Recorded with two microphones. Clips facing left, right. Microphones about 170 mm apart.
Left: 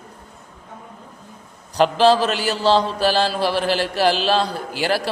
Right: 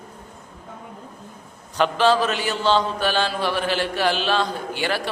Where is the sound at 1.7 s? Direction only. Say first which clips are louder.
Left 3 dB; 35° left (ahead or behind).